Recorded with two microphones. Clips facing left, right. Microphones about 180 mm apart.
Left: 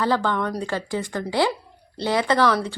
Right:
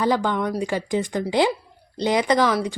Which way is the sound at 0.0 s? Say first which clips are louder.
Right 1 dB; 15° right (ahead or behind).